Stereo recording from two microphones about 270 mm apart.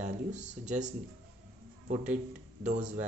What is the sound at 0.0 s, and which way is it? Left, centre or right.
Speech, right.